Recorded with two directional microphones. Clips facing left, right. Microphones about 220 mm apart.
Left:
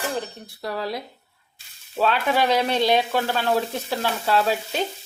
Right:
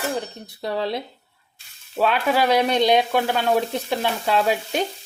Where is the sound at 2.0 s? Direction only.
10° right (ahead or behind).